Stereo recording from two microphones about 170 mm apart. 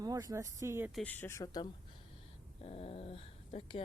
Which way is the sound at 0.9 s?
10° left (ahead or behind).